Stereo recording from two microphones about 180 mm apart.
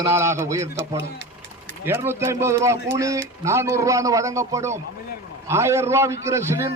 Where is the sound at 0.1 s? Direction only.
15° right (ahead or behind).